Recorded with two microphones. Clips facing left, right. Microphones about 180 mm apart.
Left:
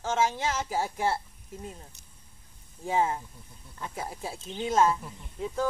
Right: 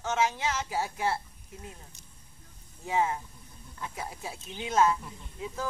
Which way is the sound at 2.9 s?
30° left (ahead or behind).